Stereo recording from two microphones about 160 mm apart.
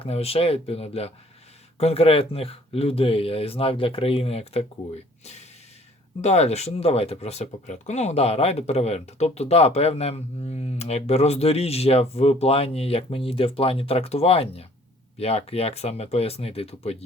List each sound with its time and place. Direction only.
0.0 s speech: 40° left (ahead or behind)